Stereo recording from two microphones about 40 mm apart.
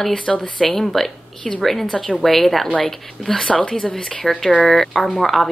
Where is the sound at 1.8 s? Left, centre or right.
Centre.